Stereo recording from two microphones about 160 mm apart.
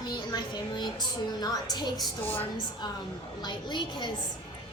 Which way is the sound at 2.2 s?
10° left (ahead or behind).